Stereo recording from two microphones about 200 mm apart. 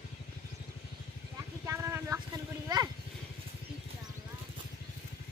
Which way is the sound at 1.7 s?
15° right (ahead or behind).